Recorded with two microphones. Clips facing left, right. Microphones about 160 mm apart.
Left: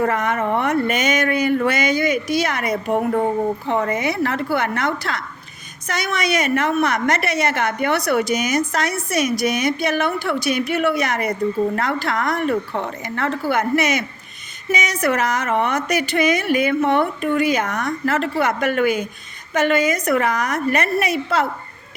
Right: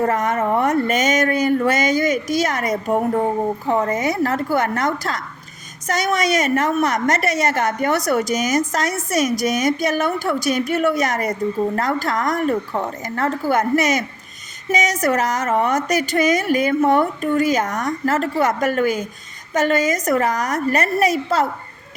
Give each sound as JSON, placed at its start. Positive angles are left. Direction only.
{"t": 0.0, "sound": "a woman's voice", "side_deg": -40}